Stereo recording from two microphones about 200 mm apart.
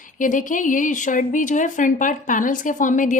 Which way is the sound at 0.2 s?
40° left (ahead or behind).